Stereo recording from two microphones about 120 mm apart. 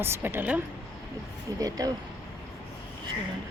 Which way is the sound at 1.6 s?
30° right (ahead or behind).